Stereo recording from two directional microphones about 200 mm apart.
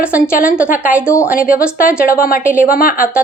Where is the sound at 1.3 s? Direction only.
45° left (ahead or behind).